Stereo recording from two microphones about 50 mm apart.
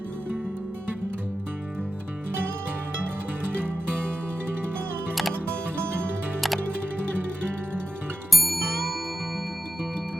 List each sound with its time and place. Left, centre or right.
3.6 s music: right
8.3 s music: centre